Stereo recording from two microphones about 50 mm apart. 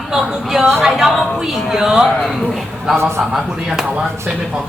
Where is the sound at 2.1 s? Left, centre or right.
Centre.